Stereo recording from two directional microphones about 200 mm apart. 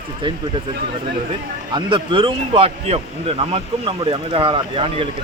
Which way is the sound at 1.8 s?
25° right (ahead or behind).